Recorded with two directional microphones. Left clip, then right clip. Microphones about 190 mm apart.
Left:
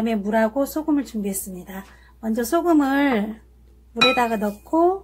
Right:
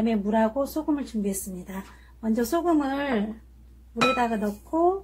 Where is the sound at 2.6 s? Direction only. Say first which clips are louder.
Left 6 dB; 30° left (ahead or behind).